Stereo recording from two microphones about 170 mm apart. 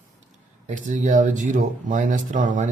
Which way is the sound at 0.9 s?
45° right (ahead or behind).